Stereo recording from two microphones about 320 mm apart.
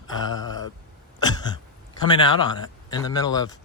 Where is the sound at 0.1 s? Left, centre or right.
Centre.